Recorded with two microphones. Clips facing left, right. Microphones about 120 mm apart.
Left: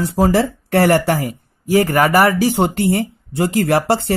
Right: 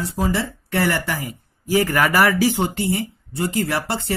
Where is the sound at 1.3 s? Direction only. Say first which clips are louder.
Left 5 dB; 45° left (ahead or behind).